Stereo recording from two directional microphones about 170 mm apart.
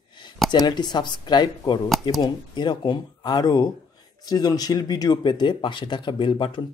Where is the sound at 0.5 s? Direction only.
25° left (ahead or behind).